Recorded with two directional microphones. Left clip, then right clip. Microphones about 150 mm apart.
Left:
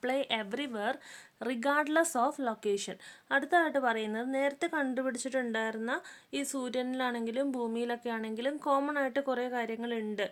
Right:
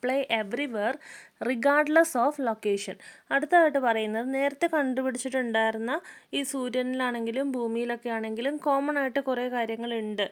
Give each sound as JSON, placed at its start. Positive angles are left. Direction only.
{"t": 0.0, "sound": "speech", "side_deg": -30}